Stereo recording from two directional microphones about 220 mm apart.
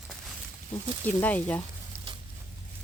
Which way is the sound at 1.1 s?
5° left (ahead or behind).